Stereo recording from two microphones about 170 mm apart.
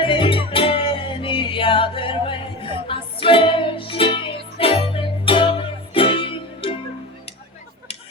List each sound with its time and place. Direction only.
0.0 s music: 30° left (ahead or behind)